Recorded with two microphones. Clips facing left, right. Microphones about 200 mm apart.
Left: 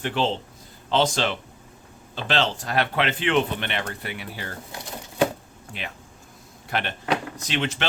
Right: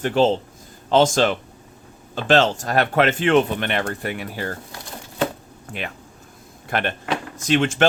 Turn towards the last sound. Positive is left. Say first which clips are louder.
# right 9 dB
turn(degrees=-50)  # may be behind; listen again after turning